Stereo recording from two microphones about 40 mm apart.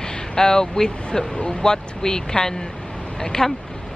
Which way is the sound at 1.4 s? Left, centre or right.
Centre.